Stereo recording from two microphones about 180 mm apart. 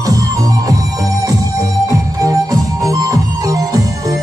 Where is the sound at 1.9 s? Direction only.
20° right (ahead or behind).